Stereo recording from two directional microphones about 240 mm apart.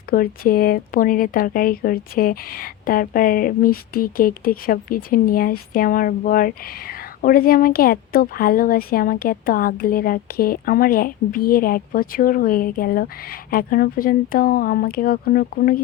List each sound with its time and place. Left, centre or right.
0.1 s speech: left